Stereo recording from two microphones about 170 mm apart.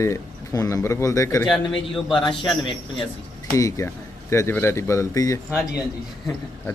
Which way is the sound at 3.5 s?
20° left (ahead or behind).